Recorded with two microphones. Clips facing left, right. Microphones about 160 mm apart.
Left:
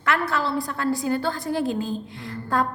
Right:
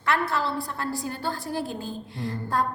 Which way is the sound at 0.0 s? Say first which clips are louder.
Left 2 dB; 90° left.